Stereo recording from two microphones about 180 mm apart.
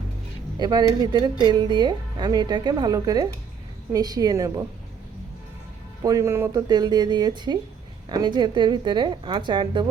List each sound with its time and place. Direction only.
0.6 s speech: 25° right (ahead or behind)
6.0 s speech: 20° right (ahead or behind)